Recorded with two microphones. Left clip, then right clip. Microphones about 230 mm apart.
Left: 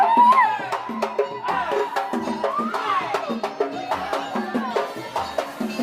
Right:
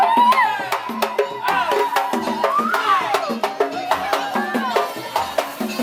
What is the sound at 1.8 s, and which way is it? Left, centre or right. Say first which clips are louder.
Music: right 5 dB; centre.